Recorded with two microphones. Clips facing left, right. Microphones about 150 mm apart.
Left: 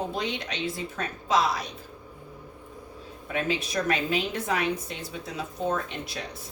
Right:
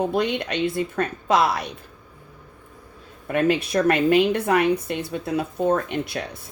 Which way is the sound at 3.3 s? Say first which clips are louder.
Right 8 dB; 60° right (ahead or behind).